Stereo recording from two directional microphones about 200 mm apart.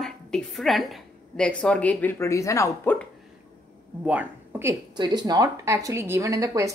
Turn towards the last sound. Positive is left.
turn(degrees=-15)  # may be behind; listen again after turning